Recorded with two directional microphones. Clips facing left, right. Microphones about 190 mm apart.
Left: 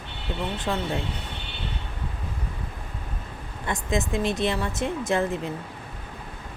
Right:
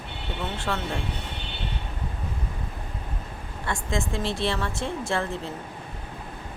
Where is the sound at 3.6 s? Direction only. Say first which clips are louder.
Left 2 dB; 20° left (ahead or behind).